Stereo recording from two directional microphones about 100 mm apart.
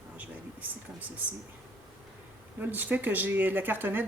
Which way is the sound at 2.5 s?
20° right (ahead or behind).